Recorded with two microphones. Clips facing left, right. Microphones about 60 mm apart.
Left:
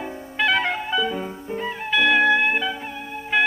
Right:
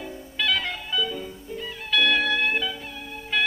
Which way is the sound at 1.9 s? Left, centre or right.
Left.